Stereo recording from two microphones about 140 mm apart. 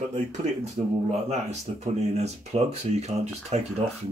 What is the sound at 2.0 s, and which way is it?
Speech, 50° right (ahead or behind).